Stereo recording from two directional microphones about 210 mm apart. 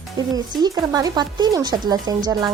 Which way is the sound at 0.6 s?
15° right (ahead or behind).